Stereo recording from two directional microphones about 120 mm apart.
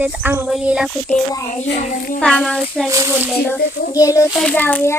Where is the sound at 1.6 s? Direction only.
90° left.